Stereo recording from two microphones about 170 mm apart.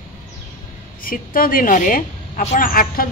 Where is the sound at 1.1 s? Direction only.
55° left (ahead or behind).